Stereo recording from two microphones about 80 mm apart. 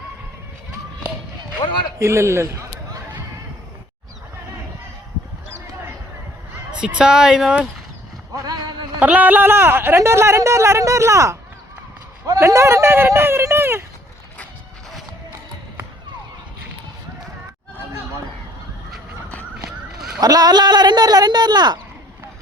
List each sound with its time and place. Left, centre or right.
2.0 s a man's voice: right
6.7 s speech: centre
8.4 s a sound: right
9.0 s speech: right
19.9 s a sound: centre
20.2 s speech: right